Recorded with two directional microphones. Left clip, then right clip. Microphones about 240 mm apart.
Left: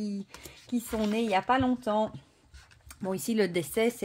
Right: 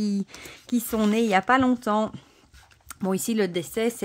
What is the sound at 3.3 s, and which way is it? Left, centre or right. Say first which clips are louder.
Speech: left 2 dB; centre.